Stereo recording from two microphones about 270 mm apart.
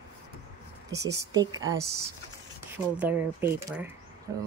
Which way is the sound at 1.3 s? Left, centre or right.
Centre.